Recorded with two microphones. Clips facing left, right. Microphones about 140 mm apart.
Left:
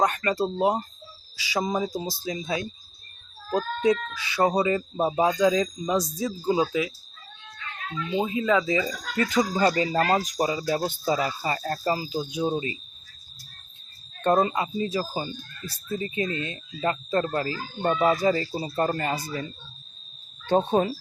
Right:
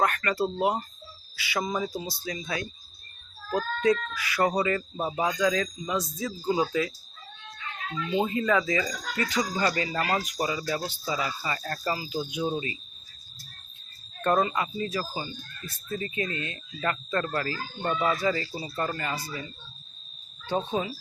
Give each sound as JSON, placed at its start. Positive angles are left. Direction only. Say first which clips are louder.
{"t": 0.0, "sound": "speech", "louder": "left 2 dB", "side_deg": 25}
{"t": 6.4, "sound": "speech", "louder": "left 2 dB", "side_deg": 15}
{"t": 7.9, "sound": "speech", "louder": "even", "side_deg": 5}
{"t": 9.4, "sound": "speech", "louder": "left 5 dB", "side_deg": 25}
{"t": 14.2, "sound": "speech", "louder": "left 3 dB", "side_deg": 30}
{"t": 20.5, "sound": "speech", "louder": "left 7 dB", "side_deg": 55}